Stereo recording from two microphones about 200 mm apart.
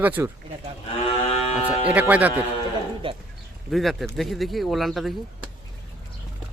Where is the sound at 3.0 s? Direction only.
25° right (ahead or behind).